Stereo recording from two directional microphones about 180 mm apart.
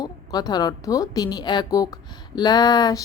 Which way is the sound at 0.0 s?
20° left (ahead or behind).